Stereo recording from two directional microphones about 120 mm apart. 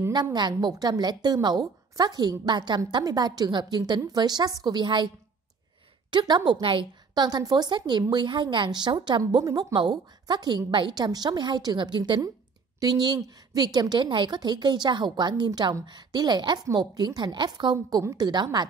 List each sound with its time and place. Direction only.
0.1 s a woman's voice: 35° right (ahead or behind)
17.7 s a woman's voice: 30° right (ahead or behind)